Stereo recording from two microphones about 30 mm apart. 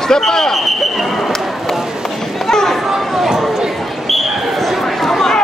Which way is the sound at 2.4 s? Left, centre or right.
Centre.